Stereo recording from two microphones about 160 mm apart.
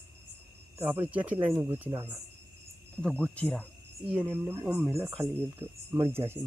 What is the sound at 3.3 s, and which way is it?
Cricket, 5° left (ahead or behind).